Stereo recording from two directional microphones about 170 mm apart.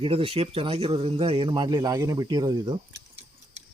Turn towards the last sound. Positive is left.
turn(degrees=-25)  # may be behind; listen again after turning